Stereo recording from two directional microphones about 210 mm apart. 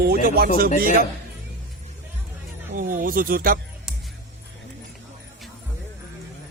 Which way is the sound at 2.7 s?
40° right (ahead or behind).